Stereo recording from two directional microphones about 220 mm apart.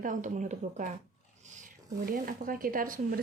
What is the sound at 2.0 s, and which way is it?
Speech, 40° right (ahead or behind).